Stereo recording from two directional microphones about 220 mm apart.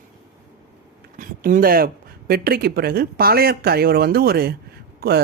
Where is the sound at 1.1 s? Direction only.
40° right (ahead or behind).